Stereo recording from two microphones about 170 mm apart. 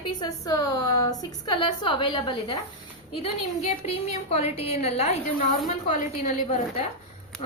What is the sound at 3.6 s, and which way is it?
A woman's voice, 40° left (ahead or behind).